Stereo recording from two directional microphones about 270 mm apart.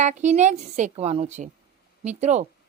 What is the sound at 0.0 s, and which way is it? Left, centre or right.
A woman's voice, right.